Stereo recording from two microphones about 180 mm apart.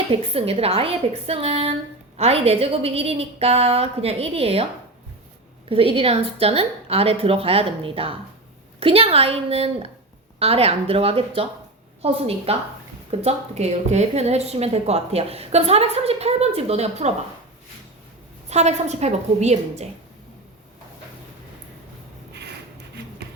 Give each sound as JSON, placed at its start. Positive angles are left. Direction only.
{"t": 0.1, "sound": "a woman's voice", "side_deg": -35}
{"t": 5.6, "sound": "a woman's voice", "side_deg": -30}
{"t": 18.4, "sound": "a woman's voice", "side_deg": -40}